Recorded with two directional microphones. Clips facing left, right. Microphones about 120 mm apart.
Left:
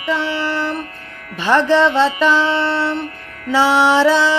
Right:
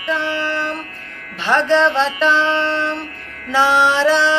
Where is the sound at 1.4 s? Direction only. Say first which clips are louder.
Left 1 dB; 5° left (ahead or behind).